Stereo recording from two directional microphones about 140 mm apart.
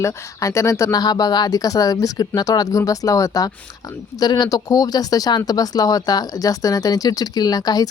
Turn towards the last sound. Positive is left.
turn(degrees=25)  # may be behind; listen again after turning